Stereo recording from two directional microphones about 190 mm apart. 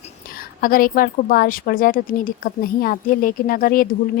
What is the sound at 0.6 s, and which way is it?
A woman's voice, 50° left (ahead or behind).